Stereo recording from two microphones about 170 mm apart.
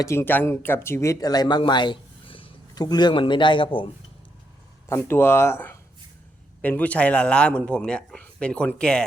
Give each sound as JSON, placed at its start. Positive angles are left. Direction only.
{"t": 0.0, "sound": "speech", "side_deg": 15}
{"t": 4.9, "sound": "a man's voice", "side_deg": 15}